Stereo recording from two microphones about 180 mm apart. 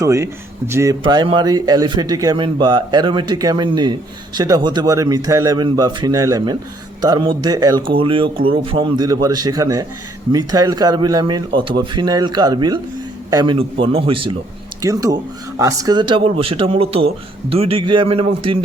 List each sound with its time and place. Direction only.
0.0 s speech: 15° right (ahead or behind)
1.0 s speech: 25° right (ahead or behind)
14.8 s speech: 20° right (ahead or behind)